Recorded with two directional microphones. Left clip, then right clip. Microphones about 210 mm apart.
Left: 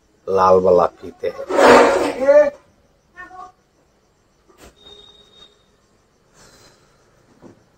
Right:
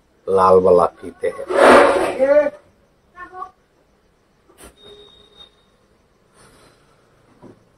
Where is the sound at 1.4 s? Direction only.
15° right (ahead or behind).